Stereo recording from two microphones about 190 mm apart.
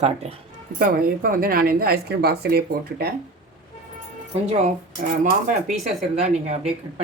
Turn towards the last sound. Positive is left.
turn(degrees=-35)  # may be behind; listen again after turning